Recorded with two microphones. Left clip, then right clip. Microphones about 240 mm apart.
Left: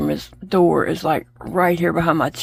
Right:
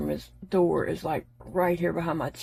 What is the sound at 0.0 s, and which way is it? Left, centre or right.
Speech, left.